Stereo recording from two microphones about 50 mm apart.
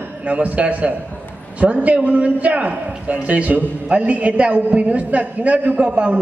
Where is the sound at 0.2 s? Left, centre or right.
Right.